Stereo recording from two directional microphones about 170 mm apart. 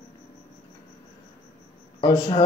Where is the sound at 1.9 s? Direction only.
30° left (ahead or behind).